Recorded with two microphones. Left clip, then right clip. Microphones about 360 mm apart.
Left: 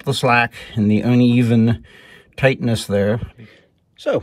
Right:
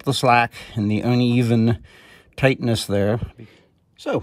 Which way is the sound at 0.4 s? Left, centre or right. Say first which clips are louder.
Left 2 dB; centre.